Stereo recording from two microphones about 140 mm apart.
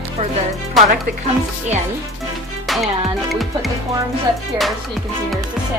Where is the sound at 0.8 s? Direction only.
Centre (ahead or behind).